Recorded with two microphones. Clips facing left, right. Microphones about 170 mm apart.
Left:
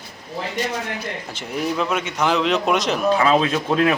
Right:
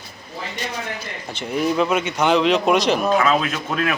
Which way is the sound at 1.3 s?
Centre (ahead or behind).